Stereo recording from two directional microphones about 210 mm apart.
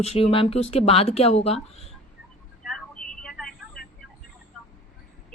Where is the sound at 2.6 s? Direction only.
Centre (ahead or behind).